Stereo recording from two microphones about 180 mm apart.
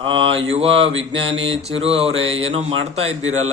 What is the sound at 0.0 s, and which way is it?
A man's voice, 30° right (ahead or behind).